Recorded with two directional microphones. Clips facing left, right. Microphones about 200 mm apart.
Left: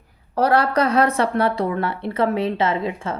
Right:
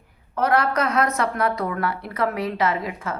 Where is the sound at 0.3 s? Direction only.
30° left (ahead or behind).